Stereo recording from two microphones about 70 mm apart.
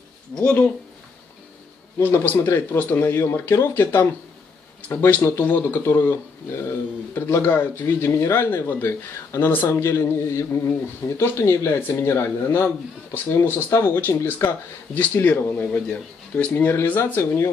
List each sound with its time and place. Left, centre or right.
0.3 s speech: centre
2.0 s speech: left
5.2 s speech: left
9.5 s speech: left
9.8 s speech: left; by 16.6 s centre
16.6 s speech: left